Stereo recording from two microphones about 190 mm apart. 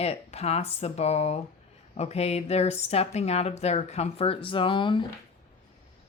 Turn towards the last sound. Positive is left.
turn(degrees=25)  # may be behind; listen again after turning